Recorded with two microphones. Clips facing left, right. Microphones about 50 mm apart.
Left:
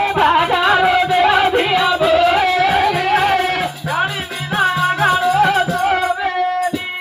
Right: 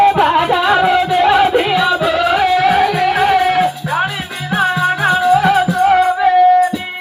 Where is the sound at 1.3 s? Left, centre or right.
Centre.